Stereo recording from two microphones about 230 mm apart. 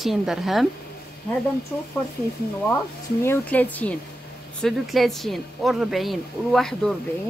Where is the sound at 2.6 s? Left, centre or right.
Centre.